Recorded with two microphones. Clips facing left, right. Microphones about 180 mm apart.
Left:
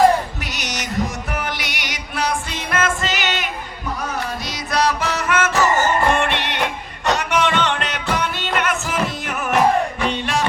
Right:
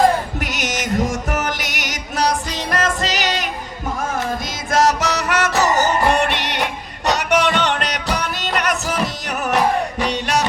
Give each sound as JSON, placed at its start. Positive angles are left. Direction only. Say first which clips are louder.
{"t": 0.3, "sound": "music", "louder": "right 5 dB", "side_deg": -50}